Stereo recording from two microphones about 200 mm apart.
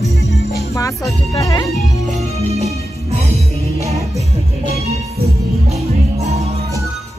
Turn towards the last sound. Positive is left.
turn(degrees=-35)  # may be behind; listen again after turning